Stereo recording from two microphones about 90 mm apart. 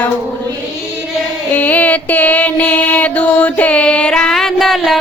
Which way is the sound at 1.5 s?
20° left (ahead or behind).